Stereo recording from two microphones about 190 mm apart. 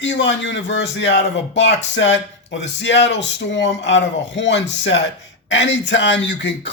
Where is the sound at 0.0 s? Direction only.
75° left (ahead or behind).